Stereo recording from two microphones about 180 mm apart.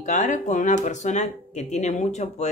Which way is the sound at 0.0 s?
45° left (ahead or behind).